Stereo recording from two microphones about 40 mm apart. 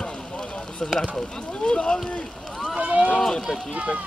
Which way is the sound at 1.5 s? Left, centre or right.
Left.